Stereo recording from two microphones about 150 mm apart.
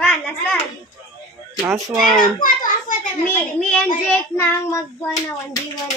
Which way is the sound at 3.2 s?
5° left (ahead or behind).